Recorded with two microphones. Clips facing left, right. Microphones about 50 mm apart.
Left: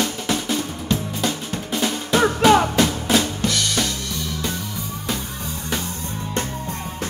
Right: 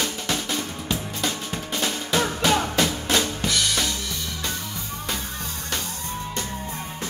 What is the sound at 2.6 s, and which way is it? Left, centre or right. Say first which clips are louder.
Drum kit: left 4 dB; centre.